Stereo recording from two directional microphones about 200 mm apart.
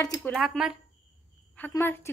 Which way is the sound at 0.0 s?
15° left (ahead or behind).